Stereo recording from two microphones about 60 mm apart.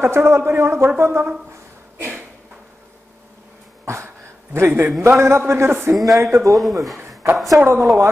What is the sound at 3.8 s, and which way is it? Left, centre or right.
Throat clearing, right.